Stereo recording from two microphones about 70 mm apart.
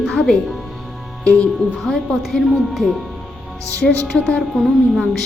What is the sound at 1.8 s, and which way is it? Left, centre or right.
Speech, centre.